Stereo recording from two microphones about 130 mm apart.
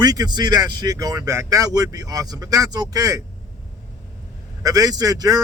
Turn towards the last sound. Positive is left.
turn(degrees=-25)  # may be behind; listen again after turning